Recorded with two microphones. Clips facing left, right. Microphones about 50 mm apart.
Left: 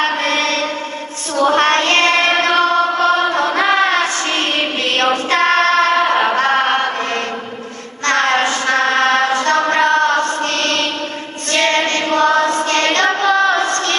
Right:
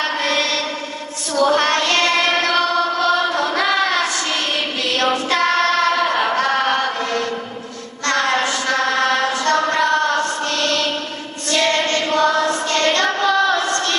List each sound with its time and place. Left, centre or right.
0.0 s mantra: left
1.4 s child singing: left
8.0 s a sound: left
11.5 s choir: left